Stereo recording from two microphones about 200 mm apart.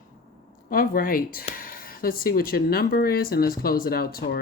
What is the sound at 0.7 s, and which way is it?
Speech, 45° left (ahead or behind).